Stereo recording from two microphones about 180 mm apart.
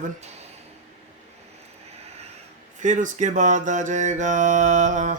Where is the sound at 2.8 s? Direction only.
45° right (ahead or behind).